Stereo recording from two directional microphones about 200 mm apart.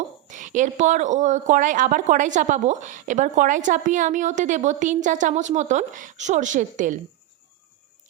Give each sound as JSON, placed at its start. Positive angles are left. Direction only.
{"t": 0.3, "sound": "speech", "side_deg": -40}